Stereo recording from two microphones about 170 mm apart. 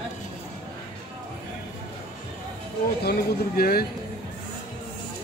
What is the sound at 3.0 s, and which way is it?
Speech, 65° left (ahead or behind).